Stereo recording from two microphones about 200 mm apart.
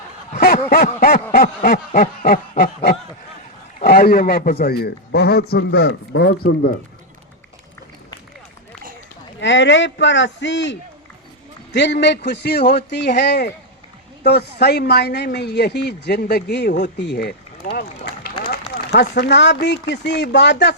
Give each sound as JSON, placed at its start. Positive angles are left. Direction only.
{"t": 0.3, "sound": "snicker", "side_deg": 50}
{"t": 0.7, "sound": "a man's voice", "side_deg": 50}
{"t": 9.4, "sound": "speech", "side_deg": 65}
{"t": 17.7, "sound": "a sound", "side_deg": 50}
{"t": 18.7, "sound": "speech", "side_deg": 55}